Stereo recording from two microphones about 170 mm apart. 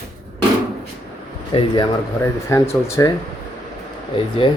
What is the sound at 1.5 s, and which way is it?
Speech, 30° left (ahead or behind).